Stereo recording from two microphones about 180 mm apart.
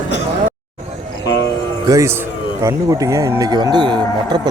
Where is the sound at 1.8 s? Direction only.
15° right (ahead or behind).